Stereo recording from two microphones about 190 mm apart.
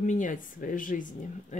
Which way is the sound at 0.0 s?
40° left (ahead or behind).